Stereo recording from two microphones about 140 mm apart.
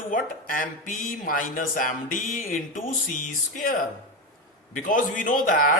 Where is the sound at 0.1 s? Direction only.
85° left.